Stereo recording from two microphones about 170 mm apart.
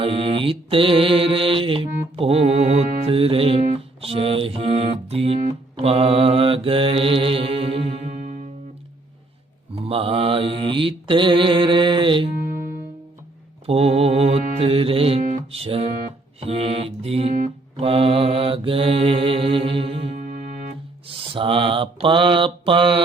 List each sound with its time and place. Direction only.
0.0 s mantra: 30° right (ahead or behind)
2.1 s music: 35° right (ahead or behind)
9.7 s mantra: 35° right (ahead or behind)
13.7 s music: 35° right (ahead or behind)
16.4 s mantra: 35° right (ahead or behind)